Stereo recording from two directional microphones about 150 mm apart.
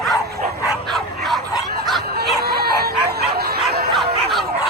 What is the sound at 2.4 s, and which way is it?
Chicken, 90° right.